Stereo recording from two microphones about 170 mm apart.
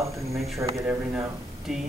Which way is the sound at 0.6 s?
15° right (ahead or behind).